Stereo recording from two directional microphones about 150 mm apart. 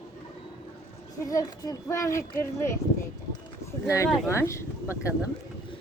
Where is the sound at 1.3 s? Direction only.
25° left (ahead or behind).